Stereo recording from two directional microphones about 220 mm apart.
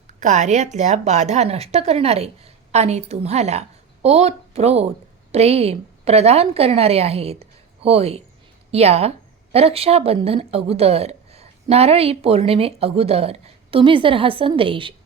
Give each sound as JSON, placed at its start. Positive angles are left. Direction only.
{"t": 0.1, "sound": "a woman's voice", "side_deg": -35}